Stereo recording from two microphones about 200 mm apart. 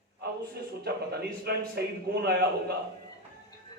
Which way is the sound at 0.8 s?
55° right (ahead or behind).